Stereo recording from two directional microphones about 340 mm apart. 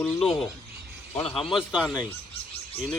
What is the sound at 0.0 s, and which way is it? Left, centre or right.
A man's voice, centre.